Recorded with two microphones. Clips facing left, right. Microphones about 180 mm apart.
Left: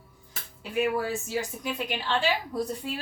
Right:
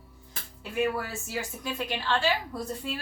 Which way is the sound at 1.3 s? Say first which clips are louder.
Left 3 dB; 15° left (ahead or behind).